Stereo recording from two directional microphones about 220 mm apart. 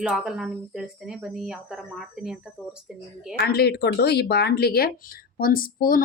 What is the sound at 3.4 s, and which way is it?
Speech, 45° left (ahead or behind).